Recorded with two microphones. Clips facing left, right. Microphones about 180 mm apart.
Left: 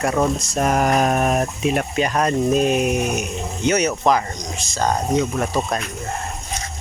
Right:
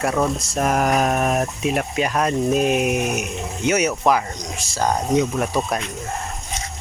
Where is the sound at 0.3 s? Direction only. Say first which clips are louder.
Left 1 dB; centre (ahead or behind).